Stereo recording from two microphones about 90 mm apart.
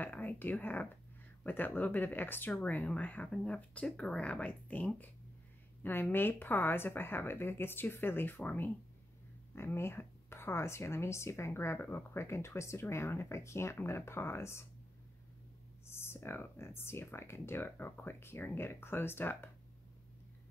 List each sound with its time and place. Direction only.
0.0 s speech: 20° left (ahead or behind)
5.8 s a sound: 20° left (ahead or behind)
6.1 s speech: 25° left (ahead or behind)
15.9 s speech: 25° left (ahead or behind)